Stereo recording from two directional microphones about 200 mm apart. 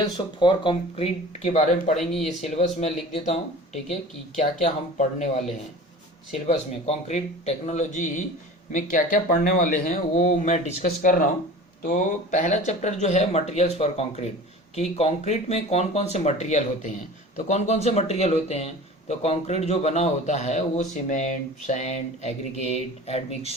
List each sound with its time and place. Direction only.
0.0 s speech: 25° left (ahead or behind)
2.0 s speech: centre (ahead or behind)
2.4 s speech: 35° left (ahead or behind)
4.6 s speech: 35° left (ahead or behind)
6.5 s speech: 30° left (ahead or behind)